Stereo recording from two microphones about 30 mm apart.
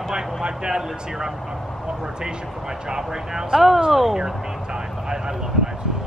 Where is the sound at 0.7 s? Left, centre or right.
Centre.